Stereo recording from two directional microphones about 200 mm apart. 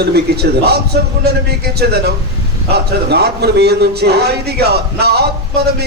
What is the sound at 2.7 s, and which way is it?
A man's voice, 55° right (ahead or behind).